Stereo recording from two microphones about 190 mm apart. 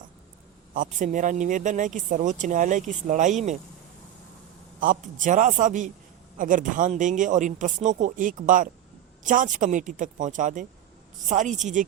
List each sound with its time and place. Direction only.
0.7 s a man's voice: 40° right (ahead or behind)
4.8 s a man's voice: 45° right (ahead or behind)